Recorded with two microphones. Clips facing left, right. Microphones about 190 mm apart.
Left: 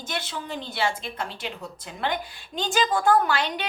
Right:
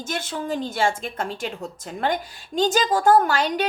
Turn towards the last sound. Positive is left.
turn(degrees=-40)  # may be behind; listen again after turning